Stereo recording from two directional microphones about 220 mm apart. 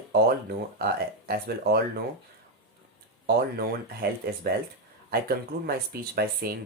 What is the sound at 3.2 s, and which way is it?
Speech, 45° right (ahead or behind).